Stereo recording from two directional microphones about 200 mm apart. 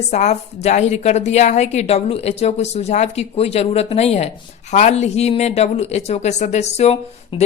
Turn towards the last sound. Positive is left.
turn(degrees=30)  # may be behind; listen again after turning